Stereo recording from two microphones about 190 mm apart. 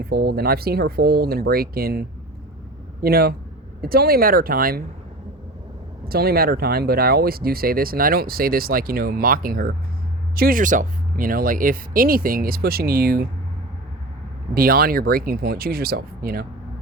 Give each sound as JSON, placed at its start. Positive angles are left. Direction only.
{"t": 0.0, "sound": "speech", "side_deg": -55}
{"t": 6.1, "sound": "speech", "side_deg": -55}
{"t": 14.5, "sound": "speech", "side_deg": -50}